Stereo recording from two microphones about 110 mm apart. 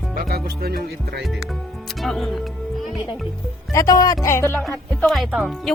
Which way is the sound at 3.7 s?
30° left (ahead or behind).